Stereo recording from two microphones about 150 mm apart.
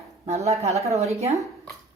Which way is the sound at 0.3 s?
45° right (ahead or behind).